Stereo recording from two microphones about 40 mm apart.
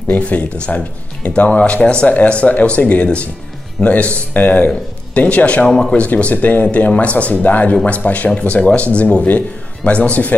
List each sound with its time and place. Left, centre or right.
0.3 s speech: left
5.7 s speech: centre
5.9 s speech: left